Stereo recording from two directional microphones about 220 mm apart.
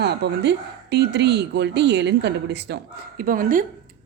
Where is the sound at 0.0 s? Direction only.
50° right (ahead or behind).